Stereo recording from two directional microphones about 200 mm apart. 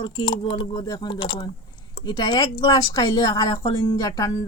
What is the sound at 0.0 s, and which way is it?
Speech, 25° left (ahead or behind).